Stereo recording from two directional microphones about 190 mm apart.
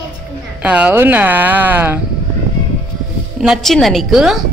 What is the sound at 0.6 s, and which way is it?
A woman's voice, 5° right (ahead or behind).